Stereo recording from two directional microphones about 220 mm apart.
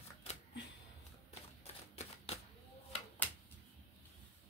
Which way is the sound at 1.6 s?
30° left (ahead or behind).